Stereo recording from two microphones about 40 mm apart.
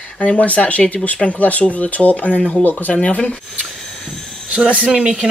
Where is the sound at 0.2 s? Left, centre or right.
Centre.